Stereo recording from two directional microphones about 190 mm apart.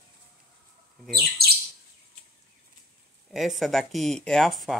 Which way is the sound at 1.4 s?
55° right (ahead or behind).